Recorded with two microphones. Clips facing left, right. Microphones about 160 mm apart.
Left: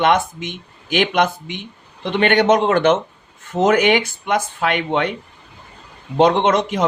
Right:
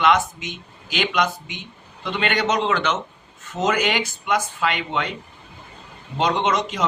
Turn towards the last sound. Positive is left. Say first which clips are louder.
# left 5 dB
turn(degrees=55)  # may be behind; listen again after turning